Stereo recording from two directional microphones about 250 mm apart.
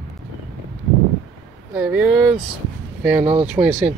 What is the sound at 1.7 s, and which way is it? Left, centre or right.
Speech, centre.